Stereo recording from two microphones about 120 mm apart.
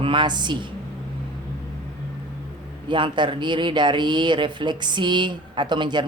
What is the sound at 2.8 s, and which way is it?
Speech, 40° right (ahead or behind).